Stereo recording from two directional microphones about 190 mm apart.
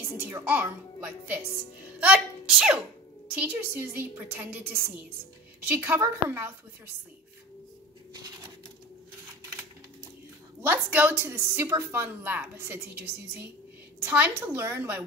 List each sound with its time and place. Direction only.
0.0 s a woman's voice: 10° right (ahead or behind)
8.1 s a sound: 20° right (ahead or behind)
10.6 s a woman's voice: 10° right (ahead or behind)